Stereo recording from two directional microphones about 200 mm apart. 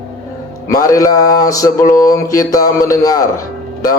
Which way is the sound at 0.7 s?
15° left (ahead or behind).